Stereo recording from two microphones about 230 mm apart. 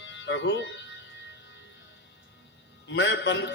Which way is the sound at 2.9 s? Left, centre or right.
Left.